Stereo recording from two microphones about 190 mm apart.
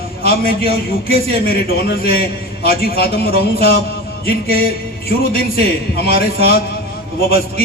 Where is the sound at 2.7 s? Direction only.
55° left (ahead or behind).